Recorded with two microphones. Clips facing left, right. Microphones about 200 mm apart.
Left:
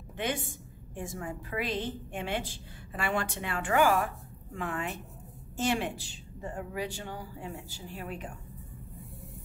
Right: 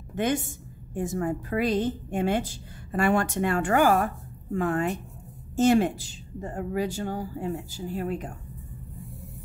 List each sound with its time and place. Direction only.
0.1 s a woman's voice: 45° right (ahead or behind)